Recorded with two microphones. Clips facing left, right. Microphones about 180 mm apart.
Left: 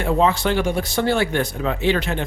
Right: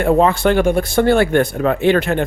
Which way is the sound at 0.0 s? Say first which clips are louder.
Right 5 dB; 55° right (ahead or behind).